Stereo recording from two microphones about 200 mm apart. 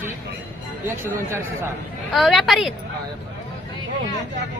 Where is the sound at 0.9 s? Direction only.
10° right (ahead or behind).